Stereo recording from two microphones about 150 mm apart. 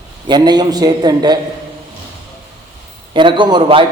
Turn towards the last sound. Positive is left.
turn(degrees=-35)  # may be behind; listen again after turning